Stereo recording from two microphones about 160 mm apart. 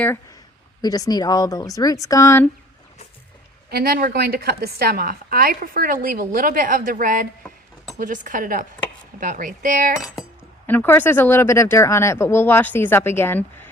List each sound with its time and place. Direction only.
0.8 s speech: 25° left (ahead or behind)
3.7 s a woman's voice: 75° right (ahead or behind); by 9.9 s 55° right (ahead or behind)
10.7 s speech: 10° left (ahead or behind)